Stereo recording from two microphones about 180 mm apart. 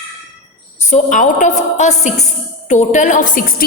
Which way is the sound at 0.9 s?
40° left (ahead or behind).